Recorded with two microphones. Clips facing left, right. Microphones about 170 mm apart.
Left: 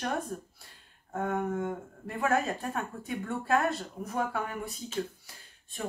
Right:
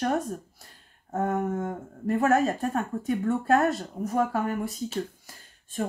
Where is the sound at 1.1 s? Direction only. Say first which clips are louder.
Right 4 dB; 45° right (ahead or behind).